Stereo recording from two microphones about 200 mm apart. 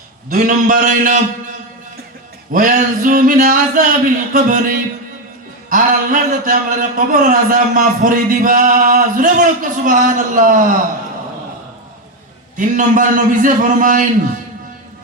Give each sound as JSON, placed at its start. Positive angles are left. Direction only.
{"t": 0.3, "sound": "a man's voice", "side_deg": -40}
{"t": 12.5, "sound": "speech", "side_deg": -40}